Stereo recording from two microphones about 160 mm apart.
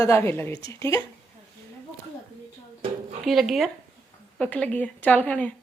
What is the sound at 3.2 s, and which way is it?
A woman's voice, centre (ahead or behind).